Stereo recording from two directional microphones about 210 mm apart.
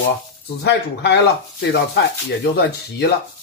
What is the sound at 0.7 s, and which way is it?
Speech, 55° left (ahead or behind).